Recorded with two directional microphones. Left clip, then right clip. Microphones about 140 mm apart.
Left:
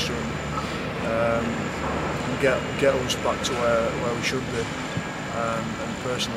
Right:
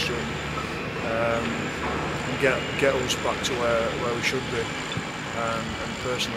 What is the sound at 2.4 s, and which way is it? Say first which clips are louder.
Speech: left 1 dB; 5° right (ahead or behind).